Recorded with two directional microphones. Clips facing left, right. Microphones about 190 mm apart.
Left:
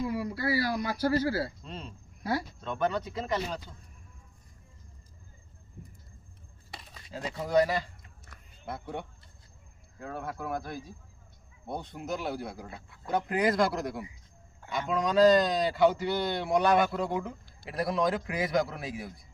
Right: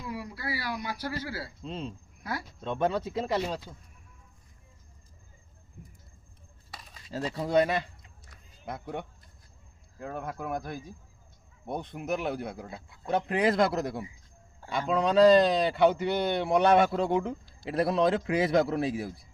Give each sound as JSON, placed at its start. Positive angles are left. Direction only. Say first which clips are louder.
{"t": 0.0, "sound": "a sound", "louder": "left 6 dB", "side_deg": 45}
{"t": 2.6, "sound": "speech", "louder": "right 3 dB", "side_deg": -25}
{"t": 7.3, "sound": "speech", "louder": "even", "side_deg": -30}